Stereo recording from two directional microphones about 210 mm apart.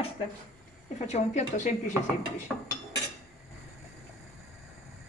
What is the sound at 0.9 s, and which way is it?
Speech, 35° left (ahead or behind).